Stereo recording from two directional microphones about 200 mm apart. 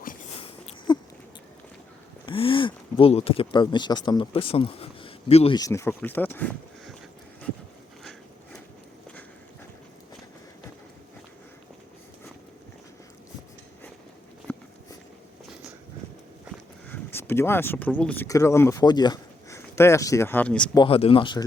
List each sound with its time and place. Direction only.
0.9 s a sound: 20° left (ahead or behind)
2.2 s speech: 25° left (ahead or behind)
5.5 s speech: 15° left (ahead or behind)
14.5 s walk: 5° left (ahead or behind)
16.9 s speech: 10° left (ahead or behind)
20.7 s speech: 25° left (ahead or behind)